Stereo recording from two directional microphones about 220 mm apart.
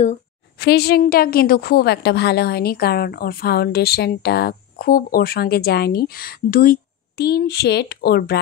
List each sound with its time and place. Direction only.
0.6 s a woman's voice: 45° left (ahead or behind)